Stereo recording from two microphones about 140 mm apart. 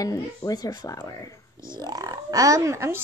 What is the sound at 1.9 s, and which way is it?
Laughter, 25° right (ahead or behind).